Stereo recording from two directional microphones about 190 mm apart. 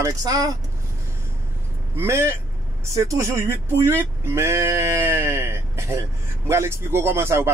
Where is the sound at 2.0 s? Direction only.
15° right (ahead or behind).